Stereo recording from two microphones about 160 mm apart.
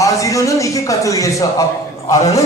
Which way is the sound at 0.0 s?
20° left (ahead or behind).